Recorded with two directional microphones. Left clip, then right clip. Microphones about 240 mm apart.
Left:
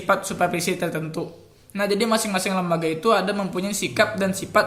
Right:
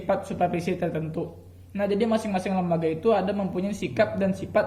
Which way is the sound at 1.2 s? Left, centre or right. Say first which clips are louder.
Left 2 dB; left.